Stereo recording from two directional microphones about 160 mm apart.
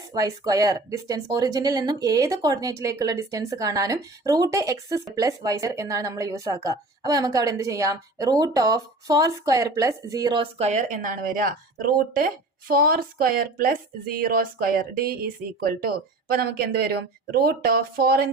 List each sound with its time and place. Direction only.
0.1 s speech: 20° right (ahead or behind); by 18.3 s 75° right (ahead or behind)